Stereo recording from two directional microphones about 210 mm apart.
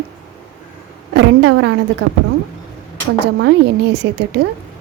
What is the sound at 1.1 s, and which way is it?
A woman's voice, 60° right (ahead or behind).